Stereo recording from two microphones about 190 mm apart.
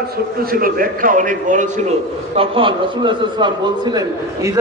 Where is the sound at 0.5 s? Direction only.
50° right (ahead or behind).